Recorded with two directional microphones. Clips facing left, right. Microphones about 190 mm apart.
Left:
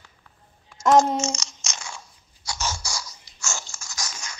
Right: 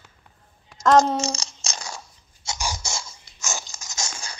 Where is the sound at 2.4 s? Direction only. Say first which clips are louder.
Even; 25° right (ahead or behind).